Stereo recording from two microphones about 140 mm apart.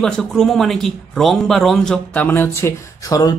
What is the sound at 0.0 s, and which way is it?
Speech, 5° left (ahead or behind).